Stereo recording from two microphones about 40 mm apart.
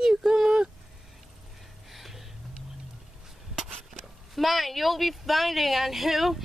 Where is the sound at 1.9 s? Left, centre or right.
Centre.